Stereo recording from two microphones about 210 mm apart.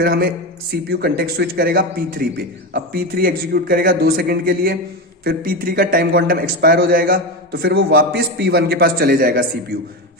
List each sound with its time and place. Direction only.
0.0 s a man's voice: 45° right (ahead or behind)